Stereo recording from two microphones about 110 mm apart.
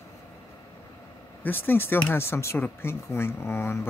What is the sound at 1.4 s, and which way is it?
A man's voice, 20° left (ahead or behind).